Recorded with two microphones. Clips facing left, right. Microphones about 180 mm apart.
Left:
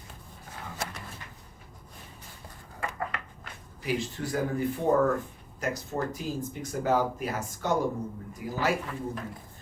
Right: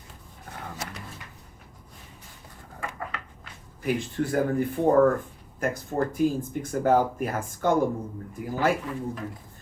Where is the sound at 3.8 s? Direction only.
55° right (ahead or behind).